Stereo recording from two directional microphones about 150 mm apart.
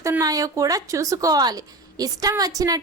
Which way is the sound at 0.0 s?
20° right (ahead or behind).